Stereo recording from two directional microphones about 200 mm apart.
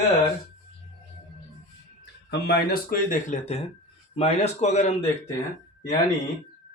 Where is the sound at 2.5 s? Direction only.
45° left (ahead or behind).